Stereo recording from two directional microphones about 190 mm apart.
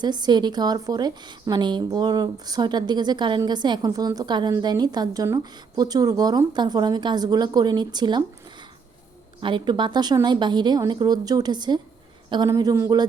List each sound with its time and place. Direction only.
0.0 s a woman's voice: 20° right (ahead or behind)
9.4 s a woman's voice: 25° right (ahead or behind)